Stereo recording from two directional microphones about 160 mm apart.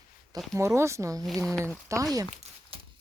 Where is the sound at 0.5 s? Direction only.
15° right (ahead or behind).